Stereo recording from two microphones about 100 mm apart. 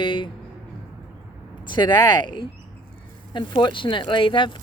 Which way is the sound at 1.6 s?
50° left (ahead or behind).